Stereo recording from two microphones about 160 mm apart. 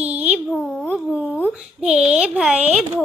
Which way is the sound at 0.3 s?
5° right (ahead or behind).